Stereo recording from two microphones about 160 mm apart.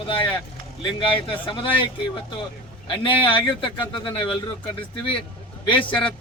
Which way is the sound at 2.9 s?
30° left (ahead or behind).